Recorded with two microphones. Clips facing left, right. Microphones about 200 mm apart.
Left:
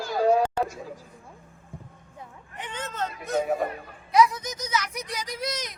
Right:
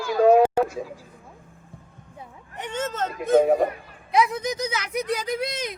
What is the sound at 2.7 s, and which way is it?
Speech, 45° right (ahead or behind).